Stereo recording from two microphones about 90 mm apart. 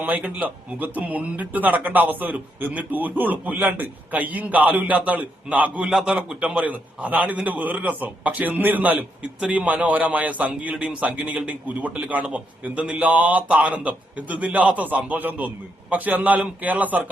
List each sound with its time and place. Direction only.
0.2 s a man's voice: 15° right (ahead or behind)
5.9 s a man's voice: 5° right (ahead or behind)